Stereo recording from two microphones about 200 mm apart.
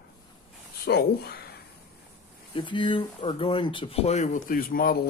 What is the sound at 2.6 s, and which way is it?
Speech, 25° left (ahead or behind).